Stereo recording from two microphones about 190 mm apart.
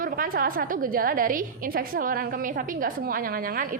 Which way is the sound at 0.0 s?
50° right (ahead or behind).